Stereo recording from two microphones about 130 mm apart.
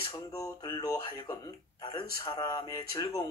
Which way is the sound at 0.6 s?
35° left (ahead or behind).